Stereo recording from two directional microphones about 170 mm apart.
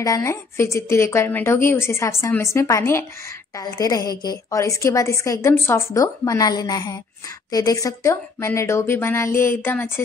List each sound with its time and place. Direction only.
0.0 s a woman's voice: 20° left (ahead or behind)